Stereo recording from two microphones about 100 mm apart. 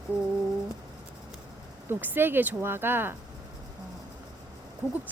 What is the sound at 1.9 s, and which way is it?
Speech, 20° right (ahead or behind).